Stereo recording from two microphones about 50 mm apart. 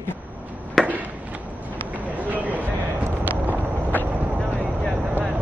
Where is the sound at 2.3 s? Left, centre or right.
Right.